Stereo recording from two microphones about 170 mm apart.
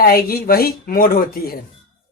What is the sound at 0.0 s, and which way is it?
A woman's voice, 65° left (ahead or behind).